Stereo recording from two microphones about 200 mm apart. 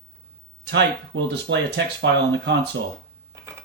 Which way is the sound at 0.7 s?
60° right (ahead or behind).